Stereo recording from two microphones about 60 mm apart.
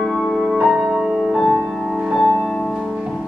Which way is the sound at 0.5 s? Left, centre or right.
Right.